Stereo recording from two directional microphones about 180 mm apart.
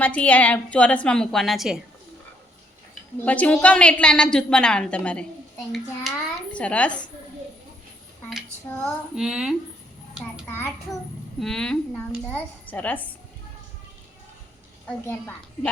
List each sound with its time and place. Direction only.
0.0 s a woman's voice: 10° left (ahead or behind)
3.2 s a woman's voice: 10° left (ahead or behind)
8.7 s a woman's voice: centre (ahead or behind)
11.3 s a woman's voice: 5° left (ahead or behind)
14.8 s a woman's voice: 10° left (ahead or behind)